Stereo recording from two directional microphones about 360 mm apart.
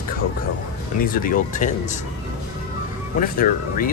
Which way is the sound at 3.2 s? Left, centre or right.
Left.